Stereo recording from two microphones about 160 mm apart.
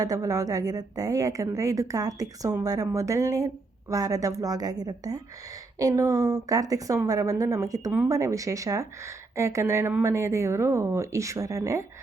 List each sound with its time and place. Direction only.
0.0 s a woman's voice: 20° right (ahead or behind)